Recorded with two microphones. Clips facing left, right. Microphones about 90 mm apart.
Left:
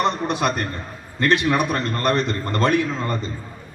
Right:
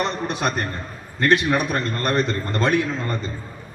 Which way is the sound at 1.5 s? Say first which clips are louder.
Left 1 dB; 40° left (ahead or behind).